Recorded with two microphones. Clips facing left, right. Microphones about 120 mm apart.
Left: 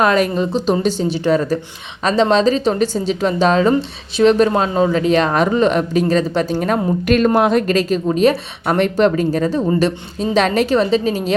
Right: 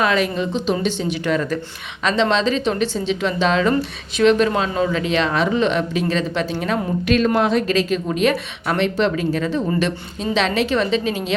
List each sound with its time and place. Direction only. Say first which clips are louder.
0.0 s speech: left 4 dB; 45° left (ahead or behind)